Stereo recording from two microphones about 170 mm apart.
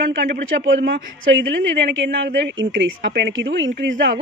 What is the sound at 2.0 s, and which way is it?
A woman's voice, 85° right.